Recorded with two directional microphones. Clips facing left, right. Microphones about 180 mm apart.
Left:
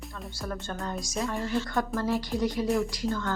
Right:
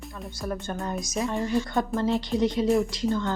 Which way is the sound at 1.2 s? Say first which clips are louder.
Right 4 dB; 20° right (ahead or behind).